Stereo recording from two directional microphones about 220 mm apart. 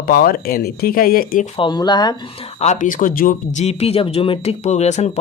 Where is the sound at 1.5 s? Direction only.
20° left (ahead or behind).